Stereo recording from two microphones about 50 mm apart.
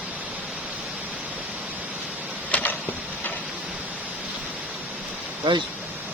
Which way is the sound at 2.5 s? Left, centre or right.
Left.